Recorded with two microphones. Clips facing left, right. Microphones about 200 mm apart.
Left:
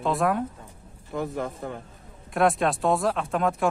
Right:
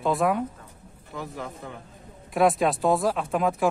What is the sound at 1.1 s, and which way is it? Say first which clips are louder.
Speech: left 6 dB; 50° left (ahead or behind).